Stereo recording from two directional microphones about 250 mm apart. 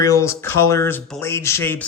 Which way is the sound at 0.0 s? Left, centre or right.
Centre.